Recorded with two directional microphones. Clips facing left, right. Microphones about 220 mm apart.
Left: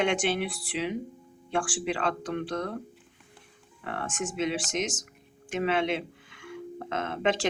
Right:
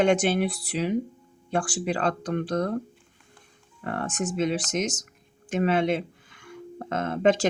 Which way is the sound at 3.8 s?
45° right (ahead or behind).